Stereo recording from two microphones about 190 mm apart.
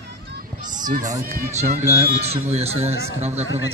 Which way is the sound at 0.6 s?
45° right (ahead or behind).